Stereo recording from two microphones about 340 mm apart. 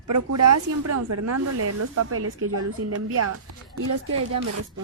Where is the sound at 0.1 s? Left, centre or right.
Right.